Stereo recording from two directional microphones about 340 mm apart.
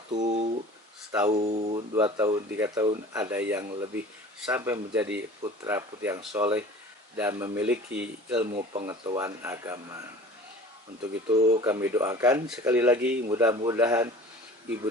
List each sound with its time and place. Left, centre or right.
0.1 s a sound: right
1.1 s speech: centre
8.5 s speech: centre
11.3 s speech: centre